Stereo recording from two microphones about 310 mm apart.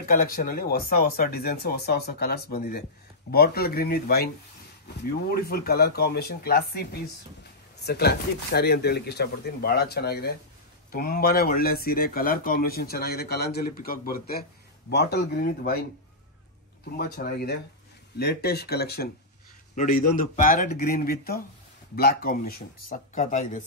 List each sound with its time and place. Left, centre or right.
0.1 s speech: left
16.9 s speech: left